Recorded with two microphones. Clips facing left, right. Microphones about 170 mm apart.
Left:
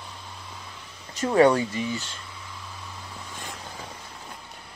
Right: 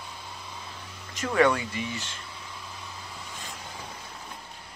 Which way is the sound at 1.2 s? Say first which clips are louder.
Left 5 dB; 35° left (ahead or behind).